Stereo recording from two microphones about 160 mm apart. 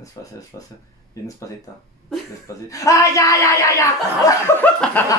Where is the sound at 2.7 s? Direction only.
20° left (ahead or behind).